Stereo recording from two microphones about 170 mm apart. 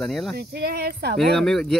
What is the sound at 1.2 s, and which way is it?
Speech, centre (ahead or behind).